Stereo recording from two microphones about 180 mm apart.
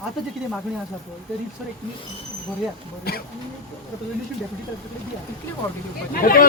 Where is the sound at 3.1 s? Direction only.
60° left (ahead or behind).